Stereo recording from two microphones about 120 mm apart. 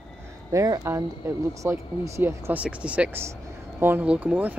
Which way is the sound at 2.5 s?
10° right (ahead or behind).